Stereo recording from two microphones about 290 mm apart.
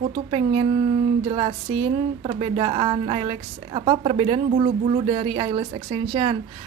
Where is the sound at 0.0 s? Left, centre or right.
Centre.